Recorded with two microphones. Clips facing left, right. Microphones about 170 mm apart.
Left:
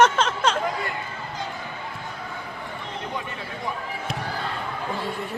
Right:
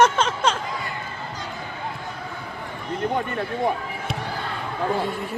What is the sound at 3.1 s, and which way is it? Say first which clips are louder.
Speech: right 7 dB; 55° right (ahead or behind).